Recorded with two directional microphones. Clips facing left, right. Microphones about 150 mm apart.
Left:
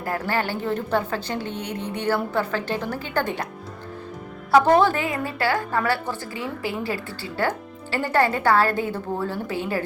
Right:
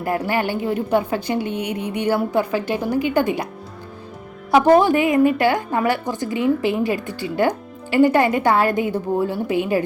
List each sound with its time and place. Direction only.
0.0 s a woman's voice: 15° right (ahead or behind)
4.5 s a woman's voice: 15° right (ahead or behind)